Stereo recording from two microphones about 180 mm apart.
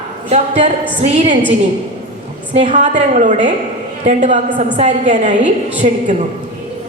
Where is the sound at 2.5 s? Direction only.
40° right (ahead or behind).